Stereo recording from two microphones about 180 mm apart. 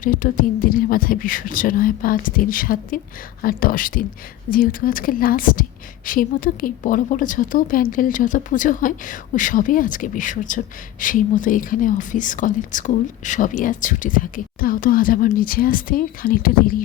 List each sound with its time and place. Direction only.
0.0 s speech: 50° left (ahead or behind)